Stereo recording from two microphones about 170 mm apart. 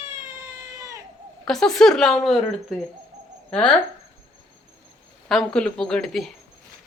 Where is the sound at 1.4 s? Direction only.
5° left (ahead or behind).